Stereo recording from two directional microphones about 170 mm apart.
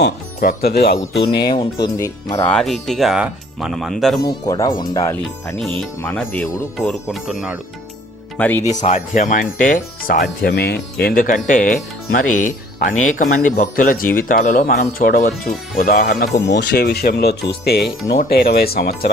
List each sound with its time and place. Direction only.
0.0 s speech: 60° left (ahead or behind)
1.4 s speech: 25° left (ahead or behind)
2.4 s speech: 5° left (ahead or behind)
4.2 s speech: 20° left (ahead or behind); by 7.6 s 5° right (ahead or behind)
8.4 s speech: 10° left (ahead or behind)
8.7 s speech: 45° left (ahead or behind); by 16.1 s 65° left (ahead or behind)
16.4 s speech: 80° left